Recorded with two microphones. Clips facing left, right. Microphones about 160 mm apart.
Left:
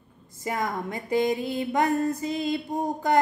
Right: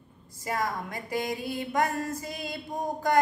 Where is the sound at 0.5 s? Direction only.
20° left (ahead or behind).